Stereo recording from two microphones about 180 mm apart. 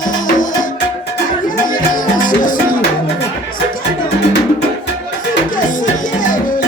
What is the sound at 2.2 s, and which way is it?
Music, 50° left (ahead or behind).